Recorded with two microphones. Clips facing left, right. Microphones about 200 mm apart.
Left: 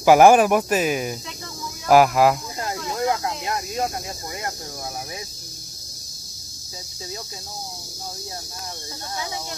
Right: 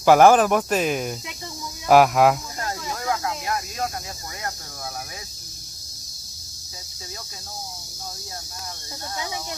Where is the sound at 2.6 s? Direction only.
20° left (ahead or behind).